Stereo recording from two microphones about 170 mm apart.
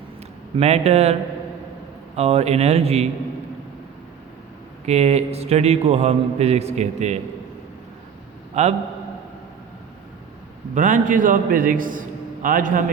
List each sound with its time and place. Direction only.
0.5 s a man's voice: 40° right (ahead or behind)
2.1 s a man's voice: 40° right (ahead or behind)
4.9 s a man's voice: 40° right (ahead or behind)
8.6 s a man's voice: 40° right (ahead or behind)
10.8 s a man's voice: 50° right (ahead or behind)